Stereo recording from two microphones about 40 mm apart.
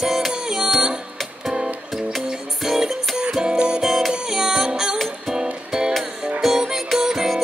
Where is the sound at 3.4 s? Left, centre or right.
Right.